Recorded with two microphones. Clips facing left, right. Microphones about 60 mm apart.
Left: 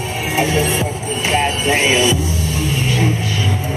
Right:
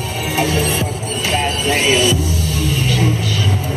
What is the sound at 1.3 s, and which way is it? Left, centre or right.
Music, left.